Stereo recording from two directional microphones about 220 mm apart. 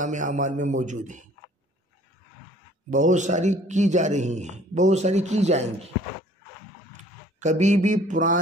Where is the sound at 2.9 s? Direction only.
35° right (ahead or behind).